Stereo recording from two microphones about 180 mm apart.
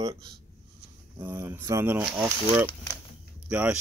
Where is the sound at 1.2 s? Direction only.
15° right (ahead or behind).